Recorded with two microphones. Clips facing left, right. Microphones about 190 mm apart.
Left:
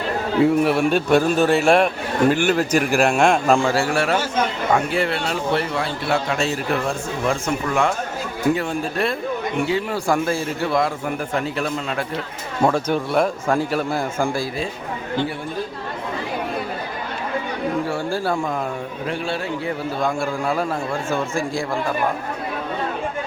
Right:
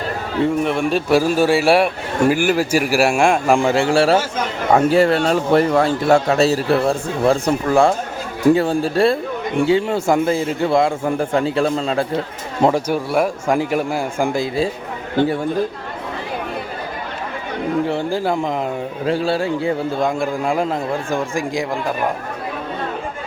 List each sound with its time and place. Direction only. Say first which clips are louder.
0.4 s a man's voice: left 1 dB; 5° left (ahead or behind); by 4.2 s 30° right (ahead or behind)
4.9 s a man's voice: right 8 dB; 40° right (ahead or behind)
12.6 s a man's voice: right 2 dB; 10° right (ahead or behind)
17.8 s a man's voice: right 3 dB; 20° right (ahead or behind)
19.0 s a man's voice: right 7 dB; 35° right (ahead or behind); by 21.6 s 15° right (ahead or behind)